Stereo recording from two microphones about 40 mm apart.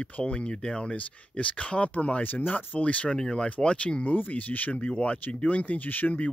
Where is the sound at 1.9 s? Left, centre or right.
Left.